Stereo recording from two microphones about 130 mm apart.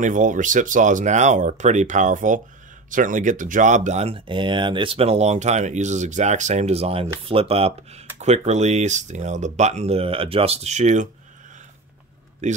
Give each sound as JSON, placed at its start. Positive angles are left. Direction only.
{"t": 0.0, "sound": "speech", "side_deg": -80}
{"t": 2.9, "sound": "speech", "side_deg": -90}
{"t": 12.4, "sound": "speech", "side_deg": -65}